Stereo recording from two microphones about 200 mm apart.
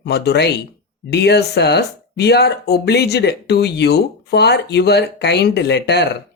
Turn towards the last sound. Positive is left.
turn(degrees=60)  # may be behind; listen again after turning